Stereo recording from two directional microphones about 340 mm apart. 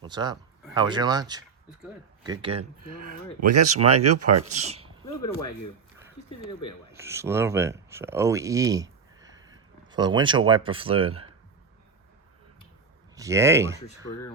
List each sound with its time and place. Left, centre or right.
0.0 s speech: centre
3.8 s speech: centre
4.1 s speech: right
4.4 s speech: centre
5.0 s speech: centre
6.9 s speech: centre
13.1 s speech: centre